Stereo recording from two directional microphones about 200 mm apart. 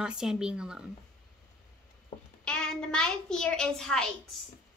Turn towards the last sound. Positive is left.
turn(degrees=5)  # may be behind; listen again after turning